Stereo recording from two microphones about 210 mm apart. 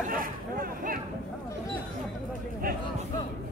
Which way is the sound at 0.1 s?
45° right (ahead or behind).